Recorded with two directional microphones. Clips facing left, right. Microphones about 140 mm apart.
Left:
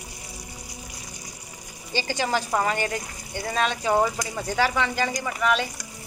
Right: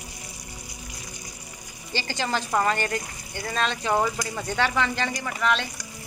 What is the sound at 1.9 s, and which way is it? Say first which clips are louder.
Speech: left 2 dB; 15° left (ahead or behind).